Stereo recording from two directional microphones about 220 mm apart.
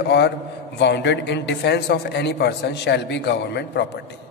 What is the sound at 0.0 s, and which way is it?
A man's voice, 50° left (ahead or behind).